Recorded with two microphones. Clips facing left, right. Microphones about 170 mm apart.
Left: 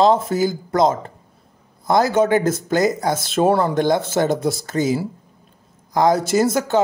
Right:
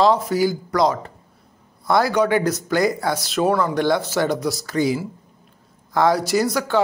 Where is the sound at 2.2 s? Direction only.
45° left (ahead or behind).